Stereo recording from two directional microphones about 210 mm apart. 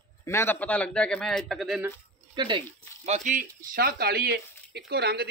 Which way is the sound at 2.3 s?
20° right (ahead or behind).